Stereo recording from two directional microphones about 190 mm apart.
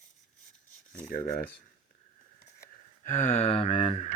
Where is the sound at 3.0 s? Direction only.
40° left (ahead or behind).